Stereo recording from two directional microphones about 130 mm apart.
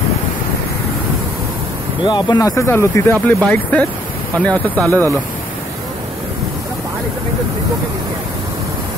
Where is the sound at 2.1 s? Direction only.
30° left (ahead or behind).